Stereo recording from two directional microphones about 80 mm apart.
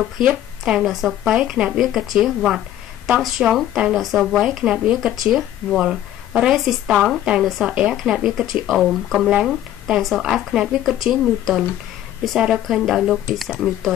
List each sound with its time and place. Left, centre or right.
0.2 s speech: centre
5.8 s speech: centre
6.5 s speech: centre